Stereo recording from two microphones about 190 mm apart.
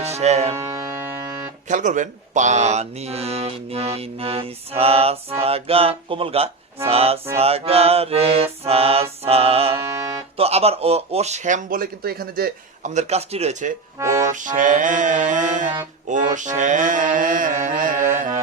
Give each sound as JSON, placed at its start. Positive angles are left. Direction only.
{"t": 0.0, "sound": "speech", "side_deg": -35}
{"t": 1.6, "sound": "speech", "side_deg": -40}
{"t": 16.0, "sound": "mantra", "side_deg": -40}